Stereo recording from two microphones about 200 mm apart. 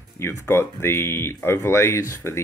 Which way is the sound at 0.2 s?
10° left (ahead or behind).